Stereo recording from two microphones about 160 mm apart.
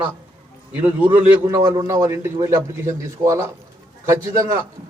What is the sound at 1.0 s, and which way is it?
A man's voice, 20° right (ahead or behind).